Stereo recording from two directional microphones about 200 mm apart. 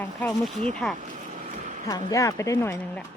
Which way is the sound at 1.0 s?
40° right (ahead or behind).